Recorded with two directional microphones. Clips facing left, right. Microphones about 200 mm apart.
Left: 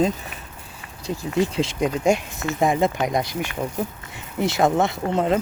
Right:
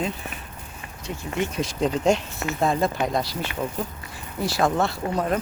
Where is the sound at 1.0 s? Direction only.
35° left (ahead or behind).